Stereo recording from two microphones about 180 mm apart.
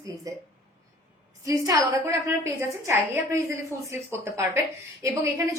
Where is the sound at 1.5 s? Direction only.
20° right (ahead or behind).